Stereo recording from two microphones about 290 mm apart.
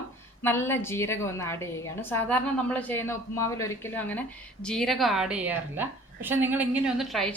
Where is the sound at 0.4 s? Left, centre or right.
Centre.